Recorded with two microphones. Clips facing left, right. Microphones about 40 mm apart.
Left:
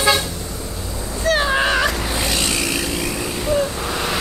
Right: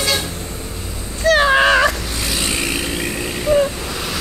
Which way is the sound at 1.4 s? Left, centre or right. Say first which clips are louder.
Right 6 dB; right.